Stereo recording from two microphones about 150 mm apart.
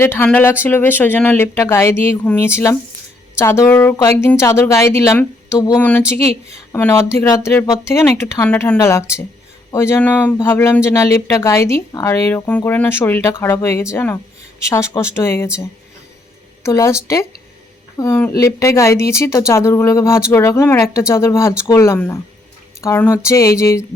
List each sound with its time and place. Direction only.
0.0 s speech: 15° left (ahead or behind)
16.6 s speech: 20° left (ahead or behind)